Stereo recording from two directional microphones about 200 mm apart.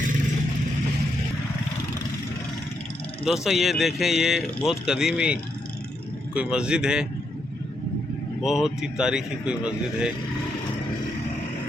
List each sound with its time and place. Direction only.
3.2 s speech: centre (ahead or behind)
8.4 s speech: centre (ahead or behind)